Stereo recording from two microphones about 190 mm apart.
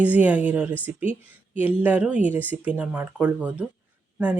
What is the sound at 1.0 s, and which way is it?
Speech, 45° right (ahead or behind).